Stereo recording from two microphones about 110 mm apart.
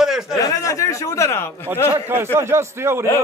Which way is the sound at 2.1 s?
20° right (ahead or behind).